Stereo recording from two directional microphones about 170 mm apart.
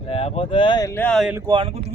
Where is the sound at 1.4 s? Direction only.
30° right (ahead or behind).